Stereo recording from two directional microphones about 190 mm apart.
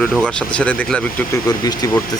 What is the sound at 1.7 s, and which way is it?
Speech, 15° left (ahead or behind).